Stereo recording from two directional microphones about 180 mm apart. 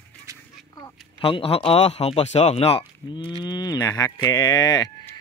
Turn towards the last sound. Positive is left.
turn(degrees=20)  # may be behind; listen again after turning